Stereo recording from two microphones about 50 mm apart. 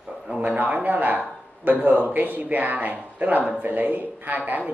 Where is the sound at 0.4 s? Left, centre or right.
Right.